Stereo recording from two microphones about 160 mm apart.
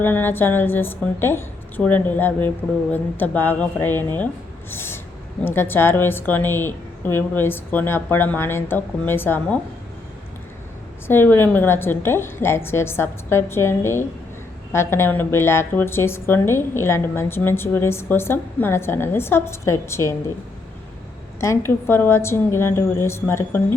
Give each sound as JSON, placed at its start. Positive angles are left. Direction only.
{"t": 0.0, "sound": "a woman's voice", "side_deg": 10}
{"t": 11.1, "sound": "a woman's voice", "side_deg": 15}
{"t": 21.4, "sound": "a woman's voice", "side_deg": 15}